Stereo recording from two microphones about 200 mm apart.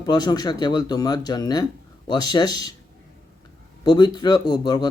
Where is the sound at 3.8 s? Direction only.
20° left (ahead or behind).